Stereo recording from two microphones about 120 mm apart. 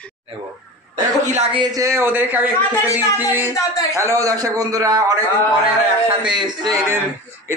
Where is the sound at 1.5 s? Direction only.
40° right (ahead or behind).